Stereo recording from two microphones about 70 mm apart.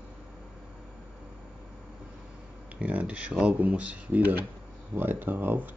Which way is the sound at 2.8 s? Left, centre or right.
Right.